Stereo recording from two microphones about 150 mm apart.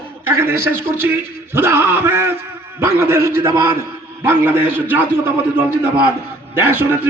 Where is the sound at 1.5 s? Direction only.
15° right (ahead or behind).